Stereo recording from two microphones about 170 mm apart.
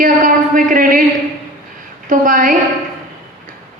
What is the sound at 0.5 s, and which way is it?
Speech, 55° right (ahead or behind).